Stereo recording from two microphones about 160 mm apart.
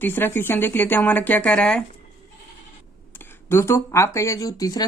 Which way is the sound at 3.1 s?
15° left (ahead or behind).